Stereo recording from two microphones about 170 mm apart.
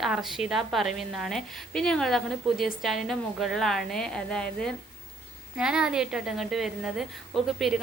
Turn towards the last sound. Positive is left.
turn(degrees=0)  # may be behind; listen again after turning